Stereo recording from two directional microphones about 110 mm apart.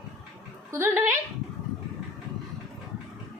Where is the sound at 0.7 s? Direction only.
25° right (ahead or behind).